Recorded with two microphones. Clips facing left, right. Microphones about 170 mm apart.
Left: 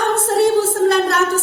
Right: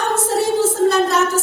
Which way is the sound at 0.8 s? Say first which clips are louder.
Even; 60° left (ahead or behind).